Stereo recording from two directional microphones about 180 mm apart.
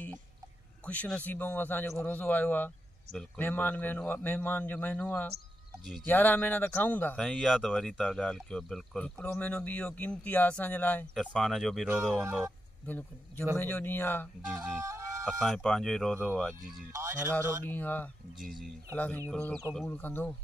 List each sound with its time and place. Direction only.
0.8 s speech: 5° left (ahead or behind)
12.2 s speech: 15° right (ahead or behind)
12.8 s speech: 10° left (ahead or behind)
14.4 s speech: 5° right (ahead or behind)
14.9 s music: 15° right (ahead or behind)
15.2 s speech: centre (ahead or behind)
16.9 s speech: 15° right (ahead or behind)
17.6 s speech: 10° left (ahead or behind)